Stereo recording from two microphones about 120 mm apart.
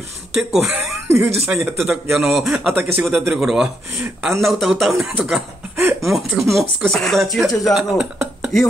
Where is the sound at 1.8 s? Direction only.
15° right (ahead or behind).